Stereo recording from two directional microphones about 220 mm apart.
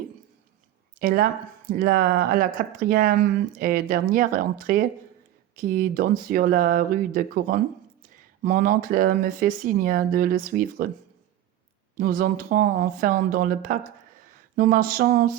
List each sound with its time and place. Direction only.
0.9 s speech: 40° right (ahead or behind)
11.9 s speech: 40° right (ahead or behind)